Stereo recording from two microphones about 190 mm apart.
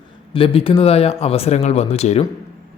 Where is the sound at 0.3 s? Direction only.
30° left (ahead or behind).